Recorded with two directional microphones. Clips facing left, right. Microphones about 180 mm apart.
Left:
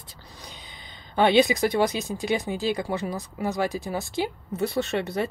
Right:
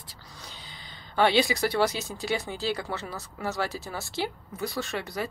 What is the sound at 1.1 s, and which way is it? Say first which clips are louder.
A woman's voice: left 4 dB; 20° left (ahead or behind).